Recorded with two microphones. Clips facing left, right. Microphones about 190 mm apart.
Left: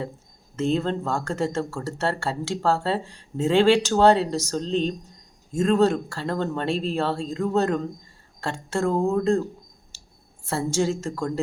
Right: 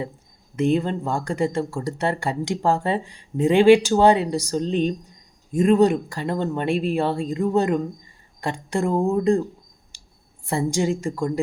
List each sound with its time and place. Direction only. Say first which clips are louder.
0.5 s speech: right 3 dB; 15° right (ahead or behind)
9.9 s a sound: left 2 dB; 15° right (ahead or behind)
10.4 s speech: right 2 dB; 15° right (ahead or behind)